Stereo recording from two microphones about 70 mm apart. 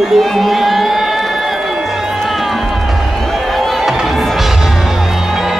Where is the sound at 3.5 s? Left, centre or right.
Centre.